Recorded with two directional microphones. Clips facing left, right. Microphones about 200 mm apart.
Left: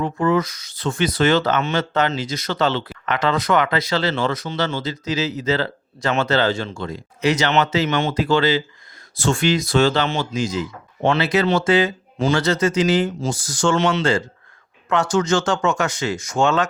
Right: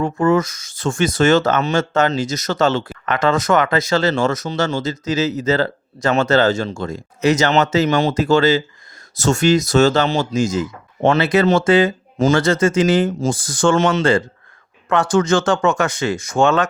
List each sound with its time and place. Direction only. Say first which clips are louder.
0.0 s speech: right 3 dB; 45° right (ahead or behind)